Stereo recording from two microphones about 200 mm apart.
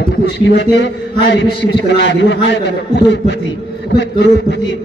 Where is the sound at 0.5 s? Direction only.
60° left (ahead or behind).